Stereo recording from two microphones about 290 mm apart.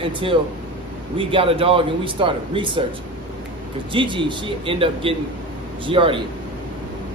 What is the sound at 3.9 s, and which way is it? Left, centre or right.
A man's voice, centre.